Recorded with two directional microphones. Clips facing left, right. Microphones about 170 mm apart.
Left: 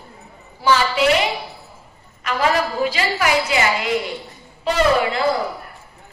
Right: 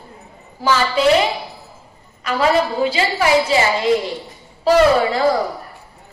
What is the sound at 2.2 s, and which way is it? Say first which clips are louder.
A woman's voice: right 3 dB; 35° right (ahead or behind).